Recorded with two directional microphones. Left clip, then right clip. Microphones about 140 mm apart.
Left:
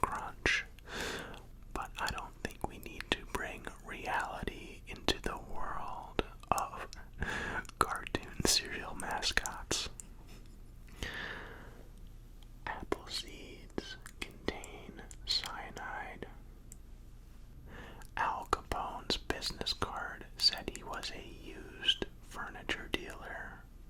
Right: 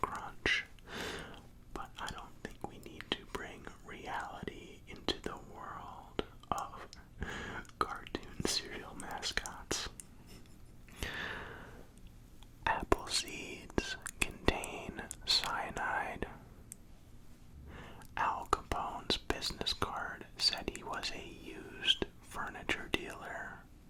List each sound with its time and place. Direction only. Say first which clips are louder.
0.1 s whispering: left 1 dB; 35° left (ahead or behind)
1.7 s whispering: left 5 dB; 50° left (ahead or behind)
4.9 s whispering: left 3 dB; 55° left (ahead or behind)
7.2 s a sound: left 5 dB; 45° left (ahead or behind)
7.7 s whispering: left 3 dB; 60° left (ahead or behind); by 9.9 s 30° left (ahead or behind)
10.9 s a sound: right 1 dB; centre (ahead or behind)
12.6 s whispering: right 7 dB; 50° right (ahead or behind)
15.0 s whispering: right 3 dB; 45° right (ahead or behind)
17.7 s whispering: left 1 dB; 10° left (ahead or behind)